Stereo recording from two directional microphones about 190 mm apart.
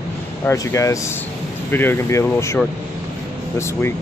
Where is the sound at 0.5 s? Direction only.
15° left (ahead or behind).